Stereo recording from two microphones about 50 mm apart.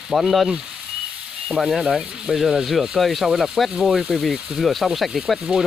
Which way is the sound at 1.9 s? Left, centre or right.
Centre.